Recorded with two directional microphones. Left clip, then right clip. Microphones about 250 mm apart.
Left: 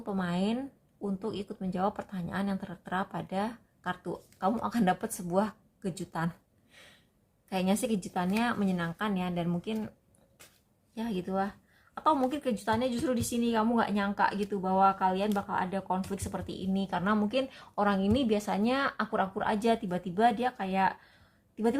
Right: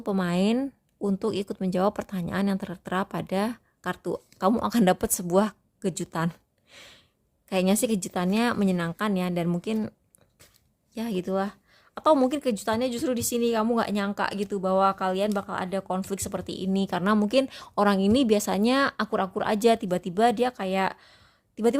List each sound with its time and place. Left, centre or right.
0.0 s speech: right
10.9 s speech: right